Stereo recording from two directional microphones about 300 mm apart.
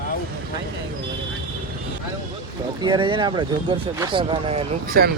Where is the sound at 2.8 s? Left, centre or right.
Centre.